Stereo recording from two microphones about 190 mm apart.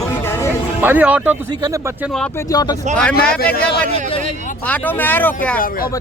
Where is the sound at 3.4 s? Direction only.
55° left (ahead or behind).